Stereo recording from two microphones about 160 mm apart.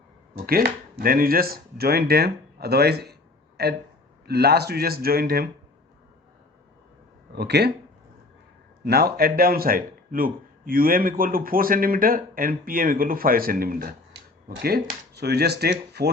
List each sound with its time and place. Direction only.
0.3 s speech: 70° right (ahead or behind)
7.3 s speech: 90° right
8.8 s speech: 80° right
15.1 s speech: 90° right